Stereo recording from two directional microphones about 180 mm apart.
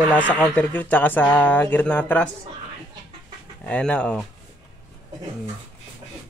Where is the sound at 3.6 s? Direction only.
5° left (ahead or behind).